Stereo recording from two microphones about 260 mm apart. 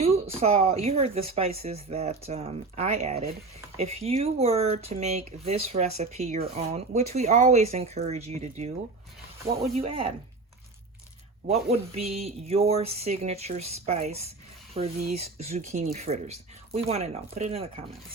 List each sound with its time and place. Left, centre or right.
0.0 s speech: right
11.4 s speech: right
14.9 s speech: right
15.2 s speech: right